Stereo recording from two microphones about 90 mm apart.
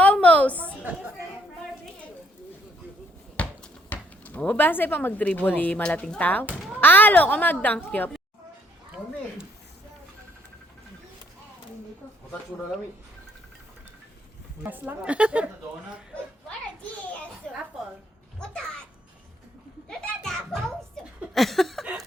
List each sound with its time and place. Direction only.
0.0 s a sound: 15° left (ahead or behind)
0.8 s a woman's voice: 20° right (ahead or behind)
3.3 s a child's voice: 15° left (ahead or behind)
14.6 s a woman's voice: 20° right (ahead or behind)
19.9 s music: 5° left (ahead or behind)
21.3 s a sound: centre (ahead or behind)